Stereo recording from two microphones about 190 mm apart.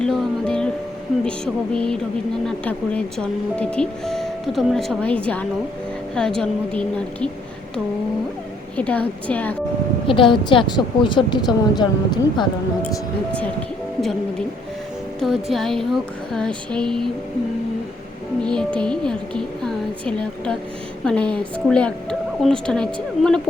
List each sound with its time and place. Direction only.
0.0 s music: 5° left (ahead or behind)
1.7 s speech: 5° left (ahead or behind)
8.7 s a woman's voice: 5° left (ahead or behind)
10.1 s a woman's voice: 25° left (ahead or behind)
14.0 s speech: centre (ahead or behind)
18.4 s speech: 5° left (ahead or behind)